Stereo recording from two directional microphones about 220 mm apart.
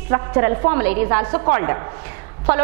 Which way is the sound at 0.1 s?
15° right (ahead or behind).